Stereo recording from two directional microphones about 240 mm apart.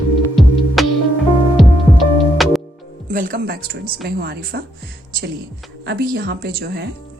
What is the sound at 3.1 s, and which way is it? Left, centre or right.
Speech, right.